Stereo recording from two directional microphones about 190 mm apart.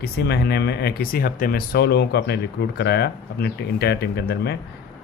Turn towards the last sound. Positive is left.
turn(degrees=60)  # may be behind; listen again after turning